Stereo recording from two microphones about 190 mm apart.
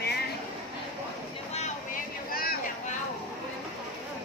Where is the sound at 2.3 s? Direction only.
50° left (ahead or behind).